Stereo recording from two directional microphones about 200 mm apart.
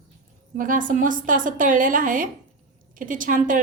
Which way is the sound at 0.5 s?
40° right (ahead or behind).